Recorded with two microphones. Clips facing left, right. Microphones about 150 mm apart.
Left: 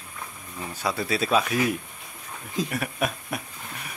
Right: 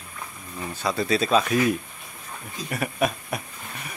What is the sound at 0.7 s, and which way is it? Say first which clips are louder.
Speech: right 3 dB; 10° left (ahead or behind).